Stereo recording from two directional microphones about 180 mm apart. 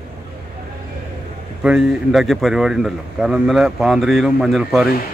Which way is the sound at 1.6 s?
5° right (ahead or behind).